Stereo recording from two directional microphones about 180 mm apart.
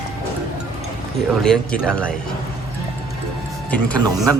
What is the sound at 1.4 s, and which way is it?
Speech, 5° left (ahead or behind).